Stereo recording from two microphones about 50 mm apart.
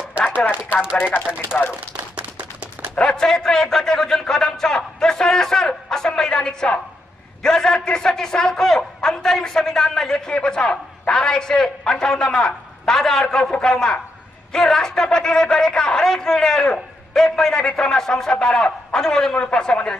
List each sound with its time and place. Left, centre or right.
2.0 s tap: right
3.1 s a man's voice: centre
13.2 s a man's voice: left
19.3 s speech: left